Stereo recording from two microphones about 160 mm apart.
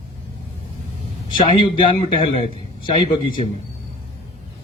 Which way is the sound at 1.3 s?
30° left (ahead or behind).